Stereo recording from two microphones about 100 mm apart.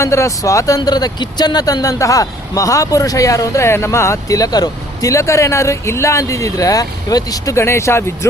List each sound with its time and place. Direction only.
0.0 s speech: 30° left (ahead or behind)